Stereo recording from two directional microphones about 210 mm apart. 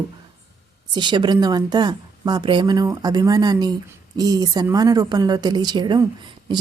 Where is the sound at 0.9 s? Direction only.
20° right (ahead or behind).